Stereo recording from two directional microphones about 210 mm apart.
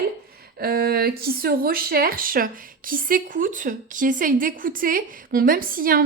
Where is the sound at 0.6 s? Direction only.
45° right (ahead or behind).